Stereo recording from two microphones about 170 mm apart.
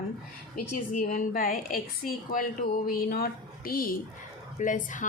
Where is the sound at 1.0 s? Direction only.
55° left (ahead or behind).